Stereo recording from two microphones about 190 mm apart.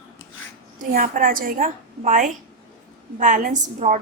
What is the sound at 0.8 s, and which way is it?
A woman's voice, 45° right (ahead or behind).